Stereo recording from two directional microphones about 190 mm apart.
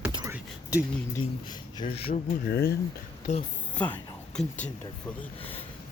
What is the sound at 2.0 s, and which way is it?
Speech, 55° left (ahead or behind).